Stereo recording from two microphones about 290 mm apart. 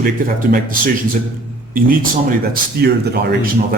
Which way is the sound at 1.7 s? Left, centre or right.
Right.